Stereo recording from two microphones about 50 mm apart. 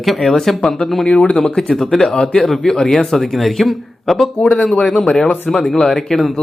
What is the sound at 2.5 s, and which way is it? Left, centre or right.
Speech, centre.